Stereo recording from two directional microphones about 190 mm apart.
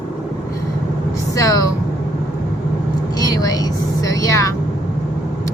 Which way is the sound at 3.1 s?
20° left (ahead or behind).